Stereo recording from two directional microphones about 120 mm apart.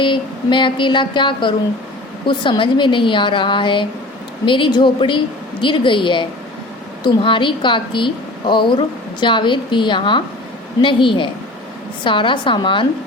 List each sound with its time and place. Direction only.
0.0 s a woman's voice: 40° left (ahead or behind)